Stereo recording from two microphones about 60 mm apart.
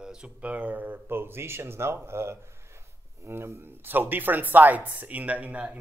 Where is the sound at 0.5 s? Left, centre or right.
Right.